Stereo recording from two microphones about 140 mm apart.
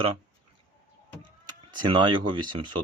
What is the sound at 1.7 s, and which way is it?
Speech, 35° right (ahead or behind).